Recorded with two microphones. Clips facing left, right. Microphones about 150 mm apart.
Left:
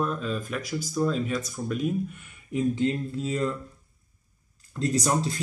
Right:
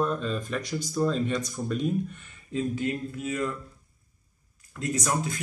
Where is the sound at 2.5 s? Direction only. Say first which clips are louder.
Left 3 dB; 25° left (ahead or behind).